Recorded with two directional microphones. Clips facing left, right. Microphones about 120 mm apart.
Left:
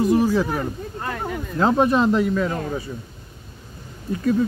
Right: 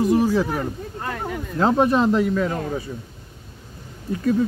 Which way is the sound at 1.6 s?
40° right (ahead or behind).